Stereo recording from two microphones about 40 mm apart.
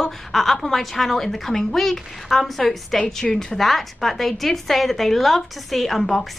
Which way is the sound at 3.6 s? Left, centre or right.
Centre.